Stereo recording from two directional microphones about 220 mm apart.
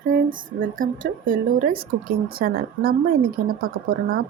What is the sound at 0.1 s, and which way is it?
A woman's voice, 40° right (ahead or behind).